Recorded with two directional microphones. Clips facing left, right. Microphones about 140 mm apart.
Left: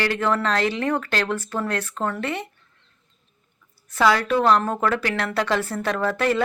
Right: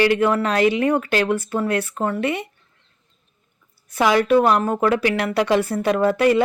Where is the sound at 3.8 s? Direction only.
15° right (ahead or behind).